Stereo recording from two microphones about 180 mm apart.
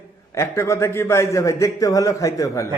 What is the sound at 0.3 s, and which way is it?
A man's voice, 15° left (ahead or behind).